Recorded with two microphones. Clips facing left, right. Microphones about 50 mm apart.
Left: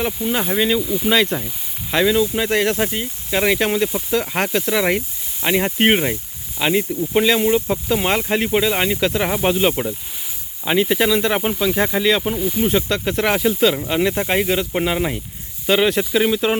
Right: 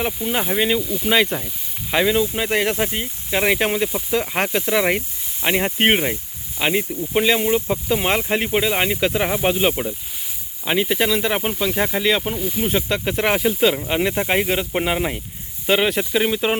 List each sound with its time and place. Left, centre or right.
0.0 s speech: centre
6.6 s speech: centre